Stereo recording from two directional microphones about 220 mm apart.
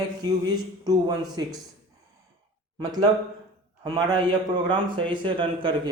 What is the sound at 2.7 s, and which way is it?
Speech, 20° right (ahead or behind).